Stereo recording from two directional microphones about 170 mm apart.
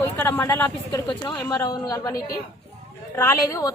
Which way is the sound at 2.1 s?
60° left (ahead or behind).